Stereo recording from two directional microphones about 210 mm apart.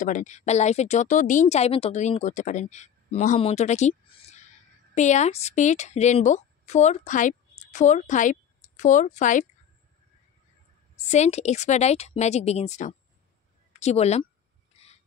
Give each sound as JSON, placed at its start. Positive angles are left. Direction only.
{"t": 0.0, "sound": "a woman's voice", "side_deg": 35}
{"t": 11.1, "sound": "speech", "side_deg": 30}